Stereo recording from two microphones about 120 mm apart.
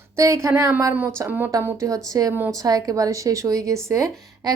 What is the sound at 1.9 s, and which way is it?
Speech, 30° right (ahead or behind).